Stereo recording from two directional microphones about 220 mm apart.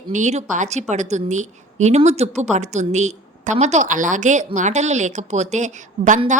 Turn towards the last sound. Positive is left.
turn(degrees=-35)  # may be behind; listen again after turning